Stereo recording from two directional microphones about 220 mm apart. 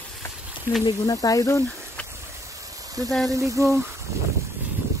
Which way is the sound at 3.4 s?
15° right (ahead or behind).